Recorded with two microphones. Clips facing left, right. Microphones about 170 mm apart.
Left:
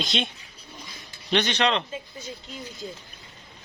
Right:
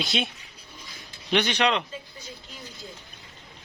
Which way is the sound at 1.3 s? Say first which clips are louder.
Even; 10° right (ahead or behind).